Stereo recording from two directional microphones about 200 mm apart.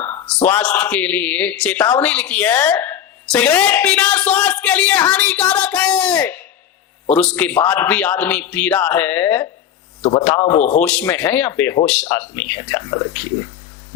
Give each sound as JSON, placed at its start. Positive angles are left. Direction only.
{"t": 0.0, "sound": "a sound", "side_deg": 10}
{"t": 0.4, "sound": "a man's voice", "side_deg": 10}
{"t": 10.0, "sound": "a man's voice", "side_deg": 30}
{"t": 10.8, "sound": "a man's voice", "side_deg": 5}